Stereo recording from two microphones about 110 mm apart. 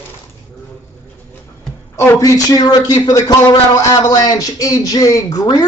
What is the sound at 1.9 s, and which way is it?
A man's voice, 30° left (ahead or behind).